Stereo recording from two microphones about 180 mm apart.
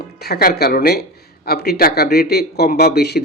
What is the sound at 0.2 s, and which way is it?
Speech, 60° left (ahead or behind).